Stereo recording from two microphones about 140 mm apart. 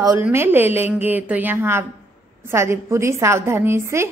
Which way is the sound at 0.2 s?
15° right (ahead or behind).